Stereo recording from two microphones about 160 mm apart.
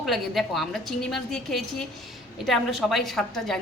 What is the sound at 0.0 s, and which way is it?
A woman's voice, centre (ahead or behind).